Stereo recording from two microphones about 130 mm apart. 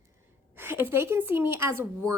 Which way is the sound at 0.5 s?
15° right (ahead or behind).